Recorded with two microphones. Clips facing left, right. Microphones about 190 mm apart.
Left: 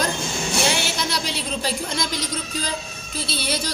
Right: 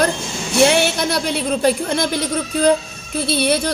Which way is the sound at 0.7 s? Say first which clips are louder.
Right 8 dB; 60° right (ahead or behind).